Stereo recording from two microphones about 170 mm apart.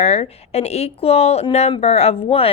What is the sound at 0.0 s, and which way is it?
Speech, 35° left (ahead or behind).